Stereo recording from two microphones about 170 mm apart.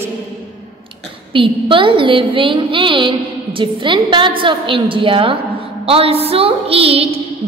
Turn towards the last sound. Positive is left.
turn(degrees=-35)  # may be behind; listen again after turning